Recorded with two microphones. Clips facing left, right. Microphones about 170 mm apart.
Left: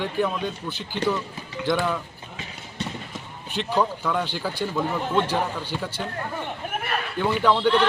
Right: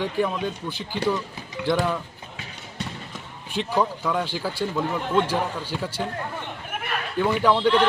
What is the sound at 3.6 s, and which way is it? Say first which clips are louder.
Speech: even; 10° right (ahead or behind).